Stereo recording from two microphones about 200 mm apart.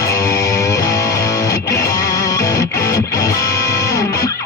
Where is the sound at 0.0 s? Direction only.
15° left (ahead or behind).